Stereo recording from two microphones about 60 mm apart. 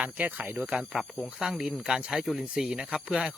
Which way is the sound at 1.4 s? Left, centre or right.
Centre.